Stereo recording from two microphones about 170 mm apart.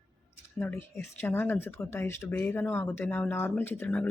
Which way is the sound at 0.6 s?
15° left (ahead or behind).